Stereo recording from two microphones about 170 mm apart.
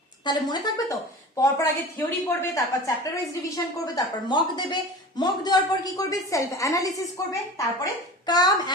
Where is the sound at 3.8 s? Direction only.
25° left (ahead or behind).